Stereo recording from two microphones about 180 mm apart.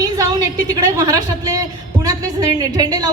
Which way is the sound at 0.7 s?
20° right (ahead or behind).